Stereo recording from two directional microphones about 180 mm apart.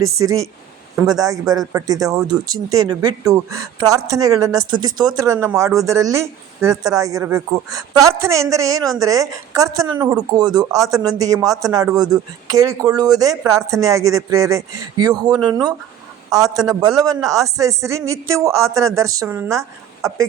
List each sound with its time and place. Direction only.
1.0 s a man's voice: 20° right (ahead or behind)